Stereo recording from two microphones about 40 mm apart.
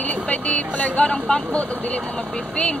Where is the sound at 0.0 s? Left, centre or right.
Left.